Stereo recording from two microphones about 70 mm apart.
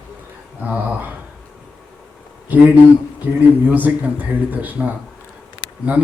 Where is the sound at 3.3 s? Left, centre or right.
Right.